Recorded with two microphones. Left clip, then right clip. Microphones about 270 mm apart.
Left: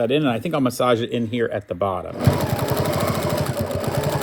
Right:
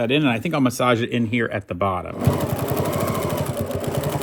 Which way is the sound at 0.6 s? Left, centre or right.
Right.